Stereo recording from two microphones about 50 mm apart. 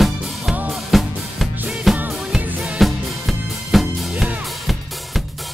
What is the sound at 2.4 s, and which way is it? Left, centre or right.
Music, right.